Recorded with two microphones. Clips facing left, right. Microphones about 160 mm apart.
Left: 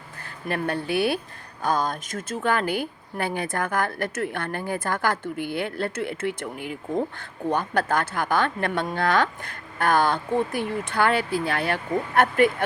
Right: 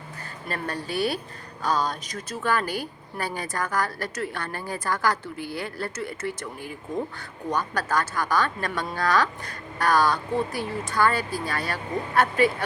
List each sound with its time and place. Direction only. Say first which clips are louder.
0.4 s speech: left 5 dB; 60° left (ahead or behind)